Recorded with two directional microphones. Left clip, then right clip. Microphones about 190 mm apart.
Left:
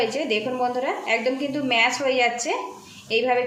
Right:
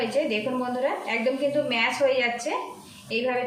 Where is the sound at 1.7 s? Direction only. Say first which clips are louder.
Left 6 dB; 40° left (ahead or behind).